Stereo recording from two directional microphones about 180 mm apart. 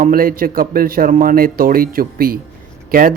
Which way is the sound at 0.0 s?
55° right (ahead or behind).